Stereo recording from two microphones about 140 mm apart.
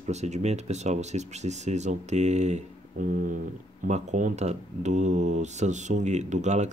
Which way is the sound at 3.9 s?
55° right (ahead or behind).